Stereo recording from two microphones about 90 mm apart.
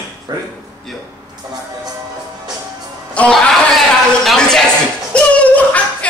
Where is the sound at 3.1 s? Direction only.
10° left (ahead or behind).